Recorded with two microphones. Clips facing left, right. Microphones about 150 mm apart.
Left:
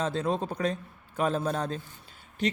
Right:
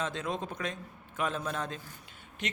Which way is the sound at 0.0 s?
35° left (ahead or behind).